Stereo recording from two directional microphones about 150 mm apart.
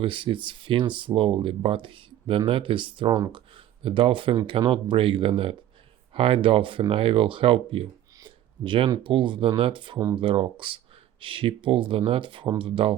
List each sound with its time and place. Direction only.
0.0 s speech: 35° right (ahead or behind)